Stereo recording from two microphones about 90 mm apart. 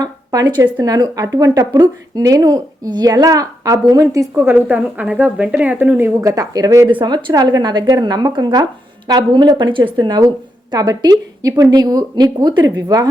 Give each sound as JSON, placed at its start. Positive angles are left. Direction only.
{"t": 0.0, "sound": "a sound", "side_deg": -45}
{"t": 0.8, "sound": "speech", "side_deg": -45}
{"t": 6.1, "sound": "speech", "side_deg": -35}
{"t": 7.0, "sound": "a woman's voice", "side_deg": -50}
{"t": 10.2, "sound": "a woman's voice", "side_deg": -45}